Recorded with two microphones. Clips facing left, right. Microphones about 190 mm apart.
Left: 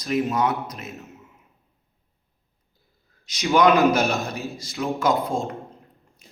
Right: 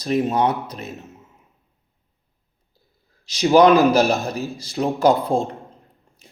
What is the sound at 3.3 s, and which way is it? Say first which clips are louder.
Speech: right 5 dB; 30° right (ahead or behind).